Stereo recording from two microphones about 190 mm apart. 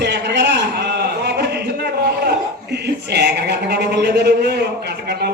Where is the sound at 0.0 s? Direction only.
65° right (ahead or behind).